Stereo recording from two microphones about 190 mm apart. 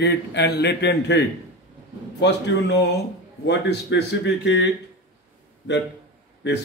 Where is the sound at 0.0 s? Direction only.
65° left (ahead or behind).